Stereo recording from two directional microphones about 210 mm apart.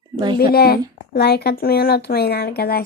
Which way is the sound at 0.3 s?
45° left (ahead or behind).